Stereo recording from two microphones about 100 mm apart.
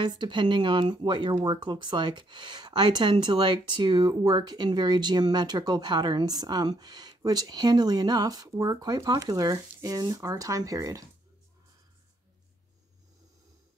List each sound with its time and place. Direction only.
0.0 s speech: 50° right (ahead or behind); by 11.1 s 35° right (ahead or behind)